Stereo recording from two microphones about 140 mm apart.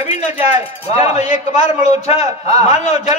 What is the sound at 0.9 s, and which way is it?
A man's voice, 50° left (ahead or behind).